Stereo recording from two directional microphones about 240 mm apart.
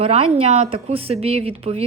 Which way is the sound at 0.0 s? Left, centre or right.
Right.